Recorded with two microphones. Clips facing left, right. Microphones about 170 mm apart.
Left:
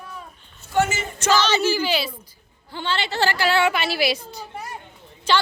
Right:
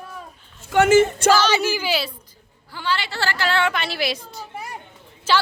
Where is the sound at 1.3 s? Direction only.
10° right (ahead or behind).